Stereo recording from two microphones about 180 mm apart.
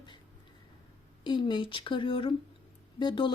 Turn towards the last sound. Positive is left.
turn(degrees=25)  # may be behind; listen again after turning